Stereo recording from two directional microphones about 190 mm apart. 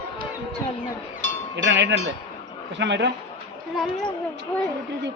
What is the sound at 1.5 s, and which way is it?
A man's voice, 70° right (ahead or behind).